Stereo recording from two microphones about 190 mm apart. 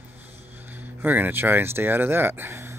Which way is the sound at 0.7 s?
10° right (ahead or behind).